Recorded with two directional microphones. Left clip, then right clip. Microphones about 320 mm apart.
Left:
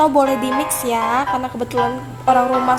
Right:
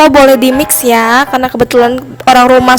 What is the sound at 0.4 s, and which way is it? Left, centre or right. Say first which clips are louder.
A woman's voice: right 10 dB; right.